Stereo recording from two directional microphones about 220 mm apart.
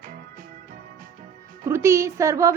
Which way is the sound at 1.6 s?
10° right (ahead or behind).